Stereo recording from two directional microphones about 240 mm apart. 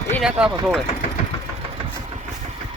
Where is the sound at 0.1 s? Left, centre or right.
Centre.